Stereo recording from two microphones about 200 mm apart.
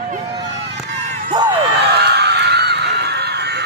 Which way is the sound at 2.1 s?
55° right (ahead or behind).